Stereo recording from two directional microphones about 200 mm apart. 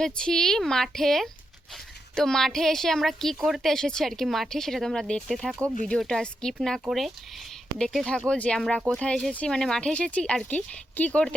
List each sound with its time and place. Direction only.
0.0 s a woman's voice: 5° left (ahead or behind)